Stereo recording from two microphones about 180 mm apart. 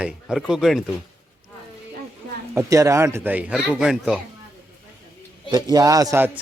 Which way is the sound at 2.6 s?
15° right (ahead or behind).